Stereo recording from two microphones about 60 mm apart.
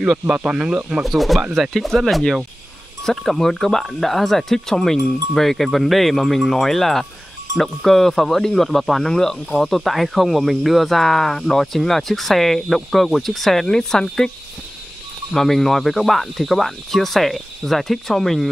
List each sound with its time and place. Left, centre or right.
0.4 s speech: centre
1.0 s speech: centre
15.3 s speech: centre